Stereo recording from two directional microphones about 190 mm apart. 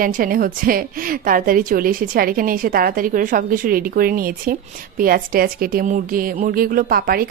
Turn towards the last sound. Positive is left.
turn(degrees=-50)  # may be behind; listen again after turning